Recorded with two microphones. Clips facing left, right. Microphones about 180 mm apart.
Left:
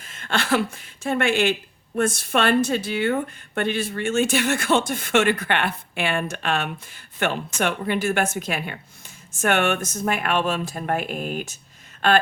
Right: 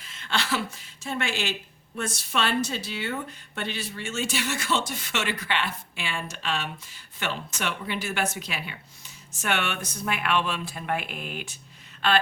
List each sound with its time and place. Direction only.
0.0 s speech: 50° left (ahead or behind)